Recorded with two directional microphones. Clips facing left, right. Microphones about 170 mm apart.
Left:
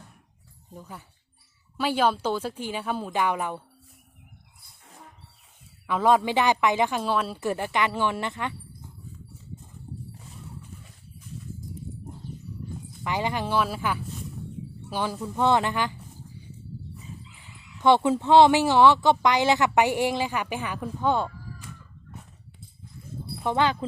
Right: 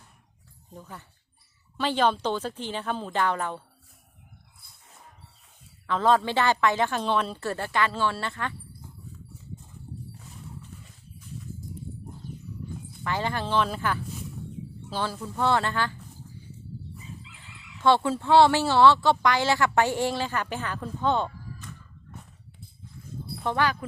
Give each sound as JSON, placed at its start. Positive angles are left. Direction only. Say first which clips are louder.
{"t": 0.7, "sound": "speech", "louder": "left 1 dB", "side_deg": 5}
{"t": 5.9, "sound": "speech", "louder": "left 1 dB", "side_deg": 10}
{"t": 13.1, "sound": "speech", "louder": "left 1 dB", "side_deg": 15}
{"t": 17.3, "sound": "chicken", "louder": "even", "side_deg": -90}
{"t": 17.7, "sound": "speech", "louder": "left 2 dB", "side_deg": 15}
{"t": 23.3, "sound": "a sound", "louder": "left 2 dB", "side_deg": 10}